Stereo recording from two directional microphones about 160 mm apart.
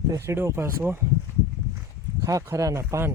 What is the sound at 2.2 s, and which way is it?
Speech, 20° right (ahead or behind).